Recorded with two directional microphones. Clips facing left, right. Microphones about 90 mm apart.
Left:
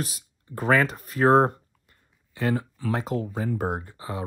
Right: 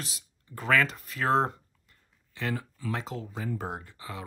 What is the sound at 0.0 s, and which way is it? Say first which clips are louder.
Speech: left 9 dB; 45° left (ahead or behind).